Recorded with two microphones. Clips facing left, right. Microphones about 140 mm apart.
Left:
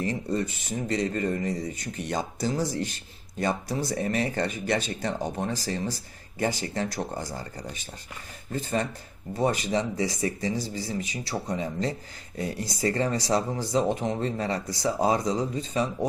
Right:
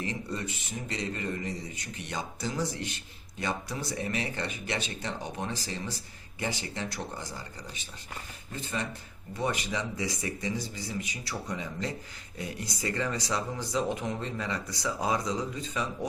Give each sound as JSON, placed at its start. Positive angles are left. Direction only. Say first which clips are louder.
{"t": 0.0, "sound": "speech", "louder": "left 7 dB", "side_deg": 40}
{"t": 8.5, "sound": "speech", "louder": "left 7 dB", "side_deg": 40}